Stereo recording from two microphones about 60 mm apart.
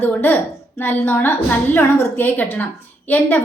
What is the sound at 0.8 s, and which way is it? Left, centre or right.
A woman's voice, left.